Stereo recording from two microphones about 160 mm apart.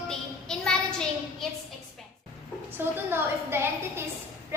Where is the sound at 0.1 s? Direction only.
5° left (ahead or behind).